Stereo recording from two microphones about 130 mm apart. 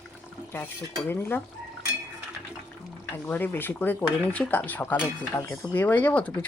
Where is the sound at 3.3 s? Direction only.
15° left (ahead or behind).